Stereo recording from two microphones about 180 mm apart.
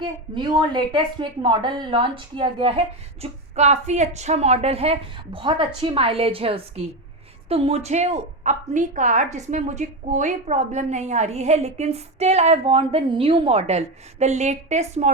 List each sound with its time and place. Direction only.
0.0 s a woman's voice: 25° right (ahead or behind)